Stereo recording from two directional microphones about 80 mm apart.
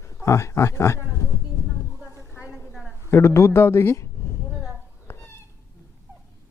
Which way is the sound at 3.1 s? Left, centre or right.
Left.